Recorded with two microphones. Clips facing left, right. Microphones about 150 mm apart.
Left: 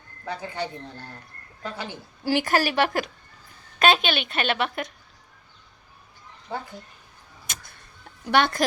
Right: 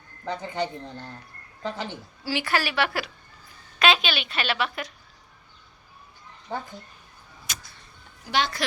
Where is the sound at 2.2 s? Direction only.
50° left (ahead or behind).